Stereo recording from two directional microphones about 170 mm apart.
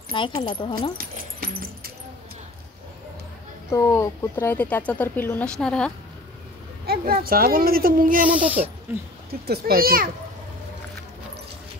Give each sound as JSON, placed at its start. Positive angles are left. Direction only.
{"t": 0.1, "sound": "speech", "side_deg": 30}
{"t": 0.9, "sound": "dog", "side_deg": -60}
{"t": 3.7, "sound": "speech", "side_deg": 15}
{"t": 6.9, "sound": "a child's voice", "side_deg": -60}
{"t": 8.3, "sound": "speech", "side_deg": -10}
{"t": 9.3, "sound": "a child's voice", "side_deg": -65}